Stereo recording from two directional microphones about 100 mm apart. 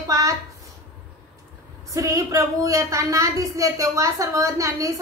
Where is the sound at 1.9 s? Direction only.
35° right (ahead or behind).